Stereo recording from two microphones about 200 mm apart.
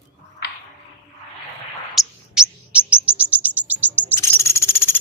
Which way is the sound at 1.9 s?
Centre (ahead or behind).